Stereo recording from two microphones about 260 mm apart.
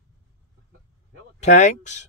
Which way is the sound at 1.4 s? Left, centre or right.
Left.